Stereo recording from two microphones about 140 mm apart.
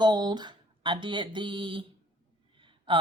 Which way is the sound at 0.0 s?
30° right (ahead or behind).